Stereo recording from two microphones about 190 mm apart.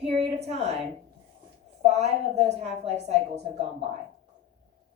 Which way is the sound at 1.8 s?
35° right (ahead or behind).